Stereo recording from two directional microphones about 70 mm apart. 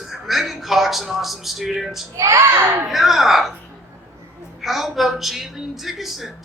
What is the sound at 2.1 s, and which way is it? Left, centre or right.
Speech, right.